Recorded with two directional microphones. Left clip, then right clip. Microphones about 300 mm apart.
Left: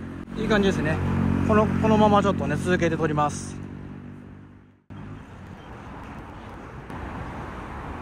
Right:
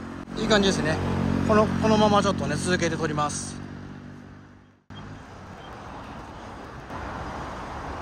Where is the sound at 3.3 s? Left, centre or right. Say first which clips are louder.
Right 1 dB; right.